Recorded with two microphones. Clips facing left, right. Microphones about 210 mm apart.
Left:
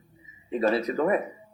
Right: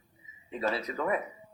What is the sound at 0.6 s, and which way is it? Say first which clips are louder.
Speech: left 7 dB; 55° left (ahead or behind).